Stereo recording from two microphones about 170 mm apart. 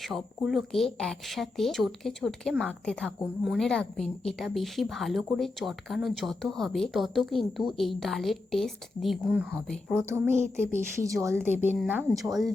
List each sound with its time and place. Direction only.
0.0 s a woman's voice: centre (ahead or behind)
10.0 s speech: 15° right (ahead or behind)
10.3 s speech: 45° right (ahead or behind)
11.0 s speech: 20° right (ahead or behind)